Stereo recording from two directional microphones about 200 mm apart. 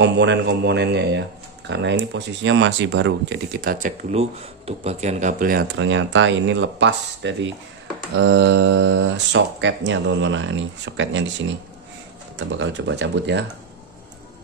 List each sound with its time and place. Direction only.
0.0 s speech: 60° right (ahead or behind)
3.6 s speech: 35° right (ahead or behind)
5.8 s speech: 70° right (ahead or behind)